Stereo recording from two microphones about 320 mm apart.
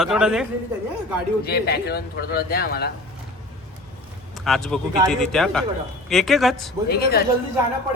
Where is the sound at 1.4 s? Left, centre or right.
Left.